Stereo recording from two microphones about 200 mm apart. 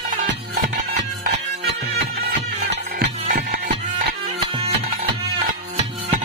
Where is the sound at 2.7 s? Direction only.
45° right (ahead or behind).